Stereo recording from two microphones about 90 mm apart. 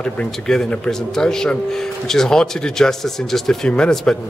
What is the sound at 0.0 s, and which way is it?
Speech, 5° left (ahead or behind).